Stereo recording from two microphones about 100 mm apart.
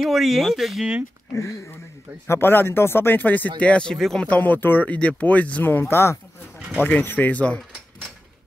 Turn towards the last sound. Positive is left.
turn(degrees=15)  # may be behind; listen again after turning